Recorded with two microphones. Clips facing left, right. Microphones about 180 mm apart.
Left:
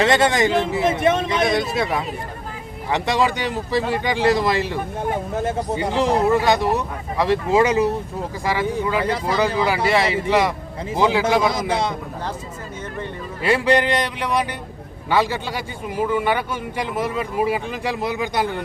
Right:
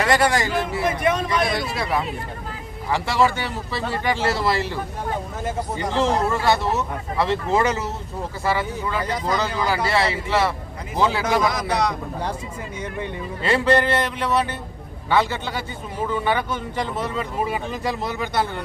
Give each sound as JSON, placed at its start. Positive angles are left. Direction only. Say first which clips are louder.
{"t": 0.0, "sound": "a man's voice", "louder": "left 3 dB", "side_deg": 25}
{"t": 13.4, "sound": "a man's voice", "louder": "left 1 dB", "side_deg": 15}